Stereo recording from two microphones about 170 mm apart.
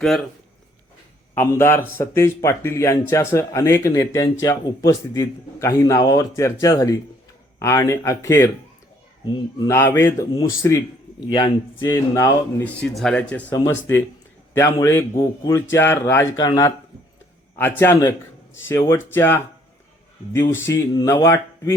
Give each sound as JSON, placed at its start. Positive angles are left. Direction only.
{"t": 1.4, "sound": "speech", "side_deg": 15}
{"t": 9.6, "sound": "speech", "side_deg": 15}
{"t": 11.9, "sound": "speech", "side_deg": 15}
{"t": 12.8, "sound": "speech", "side_deg": 0}
{"t": 13.5, "sound": "speech", "side_deg": 15}